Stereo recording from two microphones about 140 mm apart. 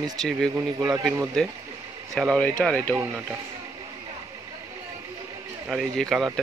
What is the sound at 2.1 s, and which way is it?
Speech, 5° left (ahead or behind).